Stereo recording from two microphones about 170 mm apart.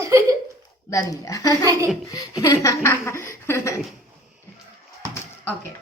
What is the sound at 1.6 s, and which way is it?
Speech, 20° right (ahead or behind).